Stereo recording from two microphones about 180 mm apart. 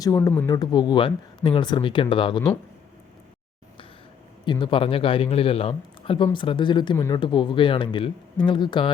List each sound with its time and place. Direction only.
0.0 s a man's voice: 20° left (ahead or behind)
4.4 s a man's voice: 25° left (ahead or behind)